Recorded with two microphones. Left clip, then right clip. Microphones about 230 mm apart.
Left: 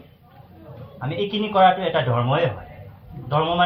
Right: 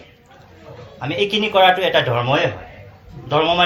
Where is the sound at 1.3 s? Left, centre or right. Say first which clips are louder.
Right 2 dB; right.